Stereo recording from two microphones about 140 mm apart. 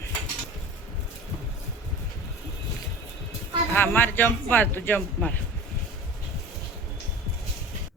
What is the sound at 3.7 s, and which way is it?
Speech, 15° left (ahead or behind).